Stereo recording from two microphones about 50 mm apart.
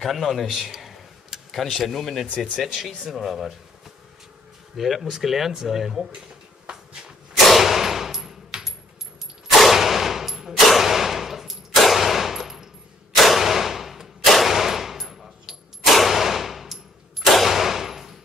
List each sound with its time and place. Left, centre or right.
0.0 s a man's voice: centre
2.2 s speech: centre
2.6 s speech: centre
4.7 s speech: centre
6.6 s a sound: centre
7.4 s clang: centre
9.5 s gunshot: centre
13.1 s a sound: centre